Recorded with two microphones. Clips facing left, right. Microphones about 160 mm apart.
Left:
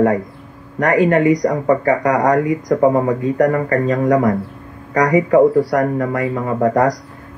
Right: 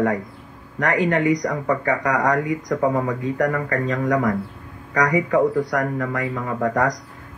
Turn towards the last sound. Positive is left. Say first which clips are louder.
# left 6 dB
turn(degrees=35)  # may be behind; listen again after turning